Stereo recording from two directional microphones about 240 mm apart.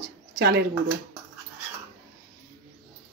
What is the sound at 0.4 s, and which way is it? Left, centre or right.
Speech, right.